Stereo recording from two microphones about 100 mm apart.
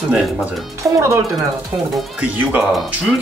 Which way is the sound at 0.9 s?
30° right (ahead or behind).